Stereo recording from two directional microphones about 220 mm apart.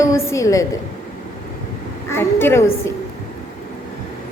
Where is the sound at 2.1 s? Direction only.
10° left (ahead or behind).